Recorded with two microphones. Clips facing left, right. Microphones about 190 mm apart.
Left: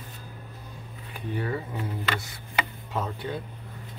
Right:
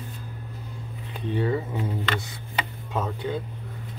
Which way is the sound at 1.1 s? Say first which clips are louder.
Right 5 dB; 25° right (ahead or behind).